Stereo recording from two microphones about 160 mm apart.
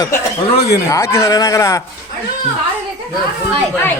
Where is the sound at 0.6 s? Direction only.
80° left.